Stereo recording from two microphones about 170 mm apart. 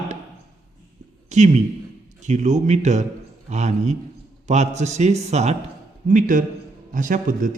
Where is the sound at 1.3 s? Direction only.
45° right (ahead or behind).